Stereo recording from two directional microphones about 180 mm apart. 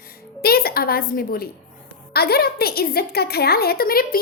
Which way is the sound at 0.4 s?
55° left (ahead or behind).